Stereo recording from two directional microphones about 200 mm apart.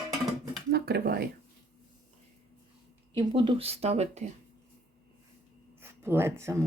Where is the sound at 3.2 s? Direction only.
25° right (ahead or behind).